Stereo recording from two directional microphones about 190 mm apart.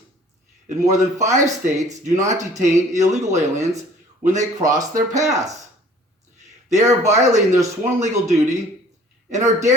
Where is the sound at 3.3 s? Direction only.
15° right (ahead or behind).